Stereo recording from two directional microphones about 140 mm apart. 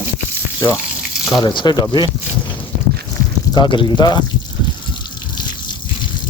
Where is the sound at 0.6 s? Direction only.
25° left (ahead or behind).